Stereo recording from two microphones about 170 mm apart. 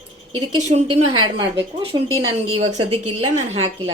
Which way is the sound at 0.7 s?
40° right (ahead or behind).